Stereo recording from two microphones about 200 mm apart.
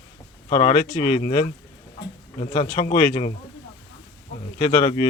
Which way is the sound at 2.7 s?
30° left (ahead or behind).